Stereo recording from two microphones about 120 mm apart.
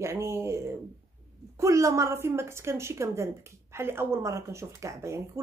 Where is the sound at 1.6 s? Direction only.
25° right (ahead or behind).